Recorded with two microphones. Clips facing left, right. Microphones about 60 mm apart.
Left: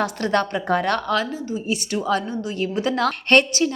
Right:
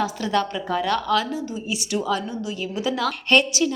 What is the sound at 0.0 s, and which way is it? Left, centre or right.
A woman's voice, left.